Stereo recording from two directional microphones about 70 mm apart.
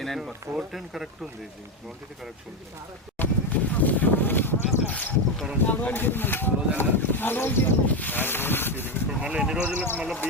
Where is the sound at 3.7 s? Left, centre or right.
Left.